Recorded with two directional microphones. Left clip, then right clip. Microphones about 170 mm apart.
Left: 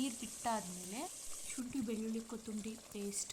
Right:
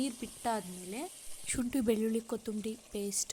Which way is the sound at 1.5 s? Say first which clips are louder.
Right 11 dB; 40° right (ahead or behind).